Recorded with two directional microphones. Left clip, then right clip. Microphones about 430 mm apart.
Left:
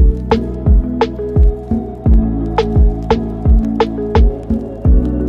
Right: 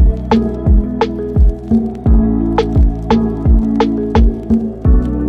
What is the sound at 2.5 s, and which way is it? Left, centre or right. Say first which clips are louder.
Music: even; centre.